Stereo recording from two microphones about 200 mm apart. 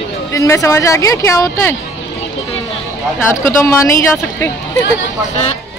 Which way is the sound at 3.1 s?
15° left (ahead or behind).